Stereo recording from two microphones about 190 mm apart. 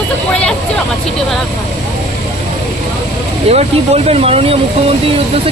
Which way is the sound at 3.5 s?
35° right (ahead or behind).